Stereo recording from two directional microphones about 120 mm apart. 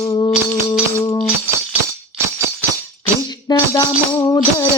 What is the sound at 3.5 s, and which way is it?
Music, 35° left (ahead or behind).